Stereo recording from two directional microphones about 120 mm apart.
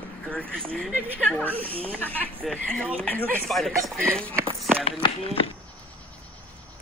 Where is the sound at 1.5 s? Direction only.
50° right (ahead or behind).